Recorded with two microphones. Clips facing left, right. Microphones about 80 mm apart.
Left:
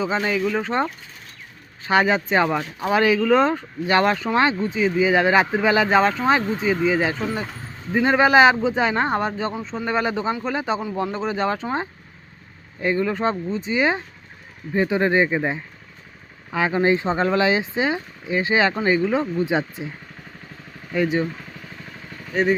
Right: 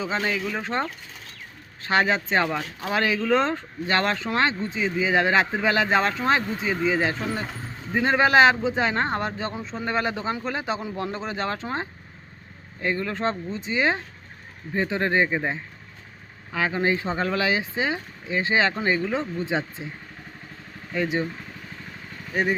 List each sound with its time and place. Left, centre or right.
0.0 s speech: centre
20.9 s speech: centre
22.3 s speech: centre